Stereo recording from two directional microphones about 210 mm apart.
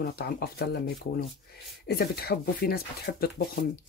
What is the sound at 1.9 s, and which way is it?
Speech, 50° left (ahead or behind).